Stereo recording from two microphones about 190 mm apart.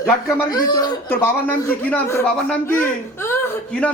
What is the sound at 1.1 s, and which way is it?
A man's voice, 10° left (ahead or behind).